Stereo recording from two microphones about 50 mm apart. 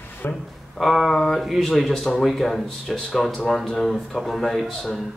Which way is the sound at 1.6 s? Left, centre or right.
Centre.